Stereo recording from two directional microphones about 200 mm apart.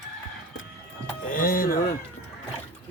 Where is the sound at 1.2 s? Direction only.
45° left (ahead or behind).